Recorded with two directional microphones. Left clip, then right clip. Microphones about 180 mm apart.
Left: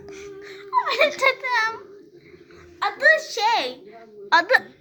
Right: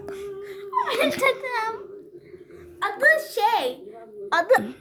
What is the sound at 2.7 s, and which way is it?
A woman's voice, 20° right (ahead or behind).